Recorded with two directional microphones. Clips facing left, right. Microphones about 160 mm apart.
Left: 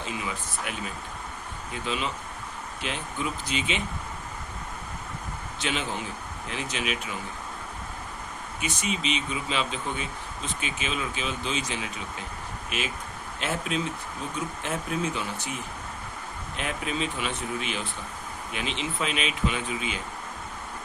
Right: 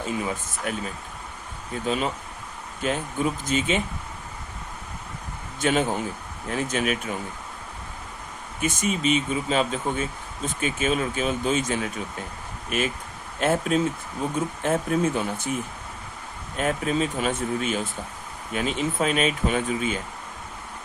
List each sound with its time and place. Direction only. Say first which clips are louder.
0.0 s speech: right 5 dB; 45° right (ahead or behind)
5.5 s speech: right 8 dB; 50° right (ahead or behind)
8.6 s speech: right 6 dB; 45° right (ahead or behind)